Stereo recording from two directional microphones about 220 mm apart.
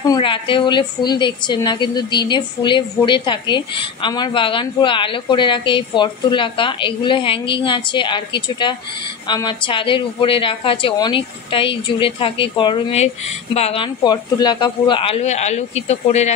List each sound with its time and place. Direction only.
0.0 s a woman's voice: 20° left (ahead or behind)